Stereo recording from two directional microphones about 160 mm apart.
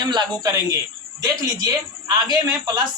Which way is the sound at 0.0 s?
30° right (ahead or behind).